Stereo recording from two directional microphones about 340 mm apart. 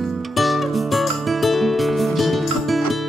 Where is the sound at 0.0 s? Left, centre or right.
Centre.